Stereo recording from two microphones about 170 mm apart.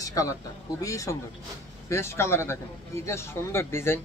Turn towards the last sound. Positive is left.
turn(degrees=15)  # may be behind; listen again after turning